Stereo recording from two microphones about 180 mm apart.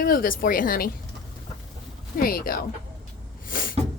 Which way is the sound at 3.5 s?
50° left (ahead or behind).